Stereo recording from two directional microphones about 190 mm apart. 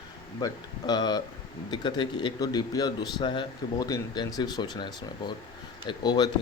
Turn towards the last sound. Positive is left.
turn(degrees=20)  # may be behind; listen again after turning